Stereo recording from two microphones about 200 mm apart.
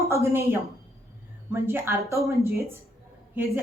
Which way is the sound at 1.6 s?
10° right (ahead or behind).